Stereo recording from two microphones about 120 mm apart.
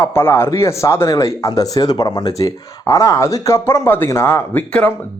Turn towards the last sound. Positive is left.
turn(degrees=15)  # may be behind; listen again after turning